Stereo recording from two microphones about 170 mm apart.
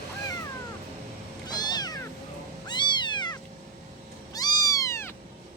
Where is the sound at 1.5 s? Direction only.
25° left (ahead or behind).